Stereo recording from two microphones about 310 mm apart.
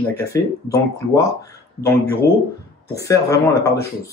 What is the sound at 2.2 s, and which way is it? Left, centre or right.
Speech, left.